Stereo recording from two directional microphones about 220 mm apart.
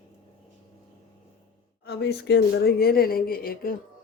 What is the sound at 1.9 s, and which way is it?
Speech, 50° left (ahead or behind).